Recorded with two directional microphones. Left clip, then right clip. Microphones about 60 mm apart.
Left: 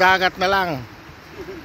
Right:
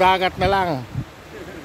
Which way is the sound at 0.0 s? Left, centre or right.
Centre.